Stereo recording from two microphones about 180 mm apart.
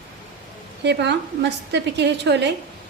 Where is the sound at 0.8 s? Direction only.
70° right (ahead or behind).